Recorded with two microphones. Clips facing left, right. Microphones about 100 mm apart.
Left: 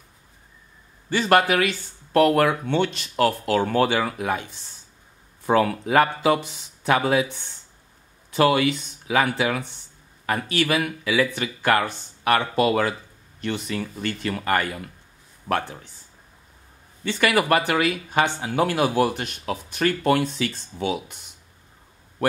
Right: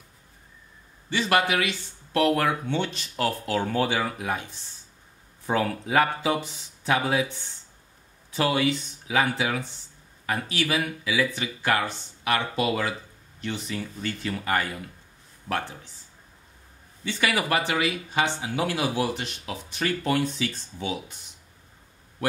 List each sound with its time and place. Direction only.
1.1 s speech: 45° left (ahead or behind)
2.4 s speech: 65° left (ahead or behind)
5.5 s speech: 65° left (ahead or behind)
8.3 s speech: 65° left (ahead or behind)
13.4 s speech: 65° left (ahead or behind)
17.0 s speech: 60° left (ahead or behind)